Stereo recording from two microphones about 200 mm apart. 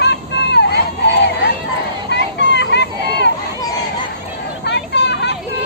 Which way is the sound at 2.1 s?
60° left (ahead or behind).